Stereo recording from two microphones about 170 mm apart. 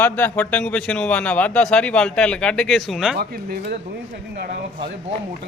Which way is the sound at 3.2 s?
65° right (ahead or behind).